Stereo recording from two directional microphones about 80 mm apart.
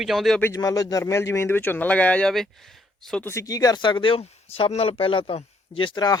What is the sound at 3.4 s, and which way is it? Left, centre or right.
Speech, left.